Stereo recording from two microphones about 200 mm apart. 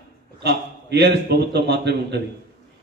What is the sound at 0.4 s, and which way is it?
A man's voice, 55° right (ahead or behind).